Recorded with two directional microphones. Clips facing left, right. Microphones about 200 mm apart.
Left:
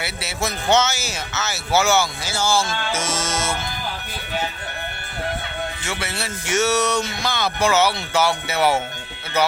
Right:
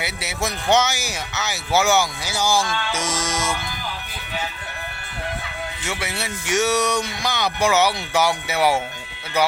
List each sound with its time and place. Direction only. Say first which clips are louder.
0.0 s speech: even; 15° right (ahead or behind)
5.9 s speech: even; 15° right (ahead or behind)